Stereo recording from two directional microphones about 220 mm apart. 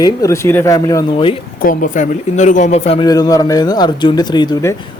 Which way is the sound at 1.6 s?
35° left (ahead or behind).